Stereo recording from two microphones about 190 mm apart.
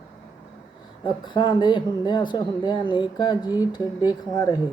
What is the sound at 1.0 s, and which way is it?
Speech, 25° left (ahead or behind).